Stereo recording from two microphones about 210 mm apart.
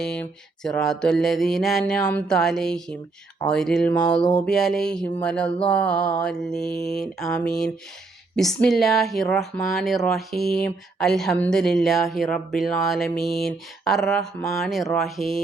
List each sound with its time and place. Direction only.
0.0 s speech: 5° left (ahead or behind)